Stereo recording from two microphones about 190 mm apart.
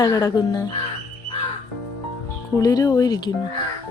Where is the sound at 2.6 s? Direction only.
20° left (ahead or behind).